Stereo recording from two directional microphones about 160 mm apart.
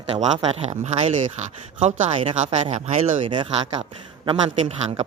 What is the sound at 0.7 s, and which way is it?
Speech, 45° right (ahead or behind).